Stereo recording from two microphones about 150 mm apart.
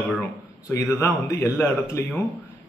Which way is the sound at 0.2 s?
20° left (ahead or behind).